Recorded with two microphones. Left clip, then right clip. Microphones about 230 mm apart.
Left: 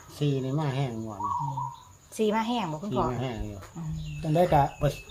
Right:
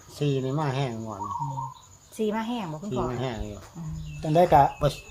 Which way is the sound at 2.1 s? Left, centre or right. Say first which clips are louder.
Left 2 dB; centre.